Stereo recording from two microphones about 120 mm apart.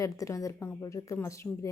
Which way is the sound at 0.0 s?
30° left (ahead or behind).